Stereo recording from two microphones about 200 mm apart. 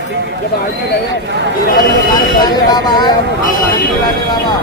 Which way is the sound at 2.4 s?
20° left (ahead or behind).